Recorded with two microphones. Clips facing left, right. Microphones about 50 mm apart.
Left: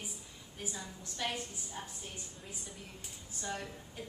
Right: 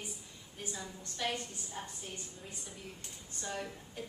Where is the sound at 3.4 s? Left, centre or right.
Centre.